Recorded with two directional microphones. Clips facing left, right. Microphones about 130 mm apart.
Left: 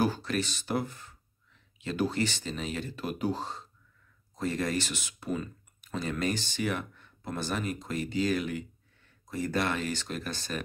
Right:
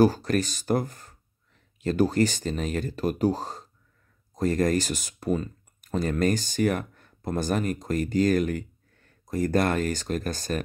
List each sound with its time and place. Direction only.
0.0 s speech: 40° right (ahead or behind)